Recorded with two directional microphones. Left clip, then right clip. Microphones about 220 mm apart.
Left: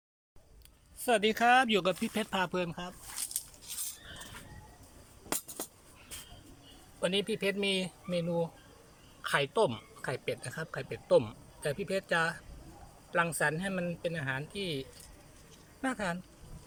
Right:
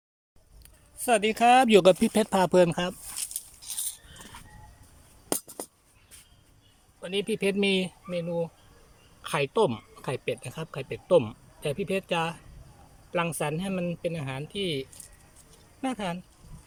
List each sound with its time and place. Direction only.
0.9 s speech: centre (ahead or behind); by 2.9 s 45° right (ahead or behind)
3.6 s a sound: 50° right (ahead or behind)
7.0 s speech: centre (ahead or behind)
8.1 s speech: centre (ahead or behind)
9.2 s speech: 15° right (ahead or behind)